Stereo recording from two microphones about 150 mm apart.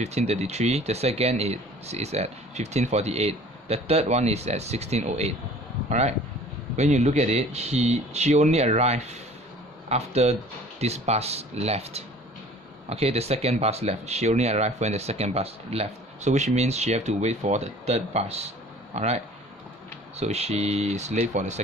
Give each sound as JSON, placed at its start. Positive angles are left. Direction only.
{"t": 0.0, "sound": "speech", "side_deg": -45}